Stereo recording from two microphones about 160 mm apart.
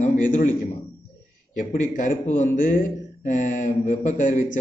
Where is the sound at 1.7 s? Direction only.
55° left (ahead or behind).